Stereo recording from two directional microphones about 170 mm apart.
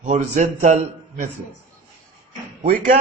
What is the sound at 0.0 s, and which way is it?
A man's voice, 45° right (ahead or behind).